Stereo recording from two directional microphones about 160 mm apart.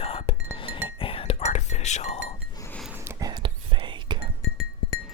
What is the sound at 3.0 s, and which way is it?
Whispering, 25° right (ahead or behind).